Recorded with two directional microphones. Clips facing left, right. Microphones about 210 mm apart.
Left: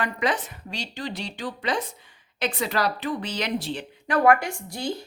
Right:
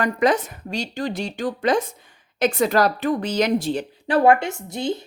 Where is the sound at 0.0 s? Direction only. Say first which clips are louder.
Right 7 dB; 45° right (ahead or behind).